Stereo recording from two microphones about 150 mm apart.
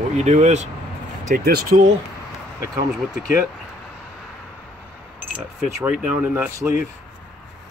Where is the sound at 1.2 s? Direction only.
80° right.